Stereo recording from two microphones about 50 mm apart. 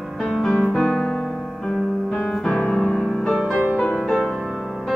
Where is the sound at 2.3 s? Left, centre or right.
Centre.